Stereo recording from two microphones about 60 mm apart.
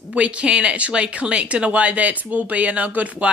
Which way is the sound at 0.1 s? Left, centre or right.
Centre.